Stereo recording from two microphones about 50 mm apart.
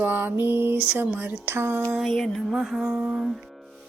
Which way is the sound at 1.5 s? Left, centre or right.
Right.